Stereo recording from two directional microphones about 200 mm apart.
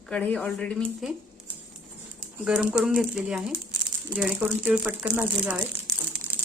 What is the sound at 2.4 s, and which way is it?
A woman's voice, 5° right (ahead or behind).